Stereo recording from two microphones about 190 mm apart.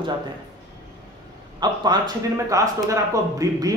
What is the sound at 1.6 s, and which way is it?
Speech, 20° right (ahead or behind).